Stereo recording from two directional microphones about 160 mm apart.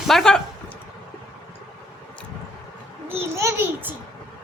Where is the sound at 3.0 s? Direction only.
15° right (ahead or behind).